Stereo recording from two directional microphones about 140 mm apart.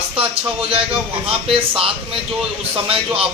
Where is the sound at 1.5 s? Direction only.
40° right (ahead or behind).